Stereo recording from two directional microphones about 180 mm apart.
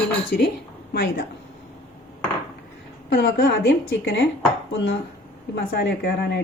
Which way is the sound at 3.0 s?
75° left (ahead or behind).